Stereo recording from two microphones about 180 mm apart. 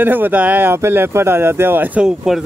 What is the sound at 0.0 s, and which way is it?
Speech, 10° right (ahead or behind).